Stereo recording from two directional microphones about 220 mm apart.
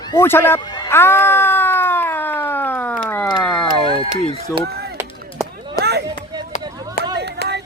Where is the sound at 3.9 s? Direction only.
25° left (ahead or behind).